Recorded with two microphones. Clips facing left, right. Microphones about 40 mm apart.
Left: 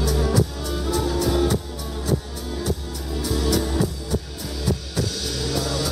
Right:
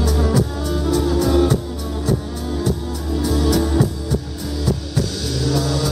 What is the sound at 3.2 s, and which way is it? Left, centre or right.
Music, centre.